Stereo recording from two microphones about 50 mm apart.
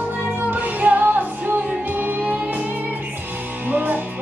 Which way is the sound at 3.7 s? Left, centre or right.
Right.